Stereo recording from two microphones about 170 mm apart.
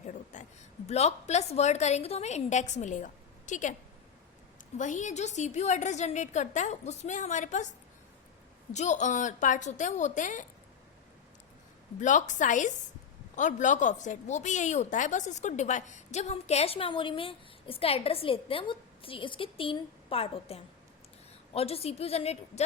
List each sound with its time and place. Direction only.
0.3 s a sound: 45° left (ahead or behind)
0.9 s a woman's voice: 40° left (ahead or behind)
4.8 s a woman's voice: 45° left (ahead or behind)
8.7 s a woman's voice: 45° left (ahead or behind)
11.9 s a woman's voice: 45° left (ahead or behind)